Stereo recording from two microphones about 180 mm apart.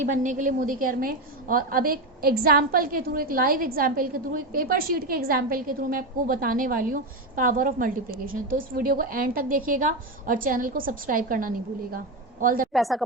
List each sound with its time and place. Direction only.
0.0 s a woman's voice: 45° right (ahead or behind)
12.7 s a woman's voice: centre (ahead or behind)